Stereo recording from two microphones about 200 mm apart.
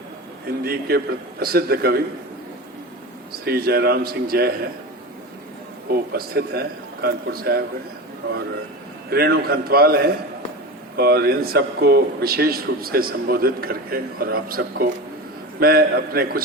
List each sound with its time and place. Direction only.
0.6 s speech: 50° right (ahead or behind)
3.4 s speech: 50° right (ahead or behind)
5.9 s speech: 50° right (ahead or behind)
9.0 s speech: 50° right (ahead or behind)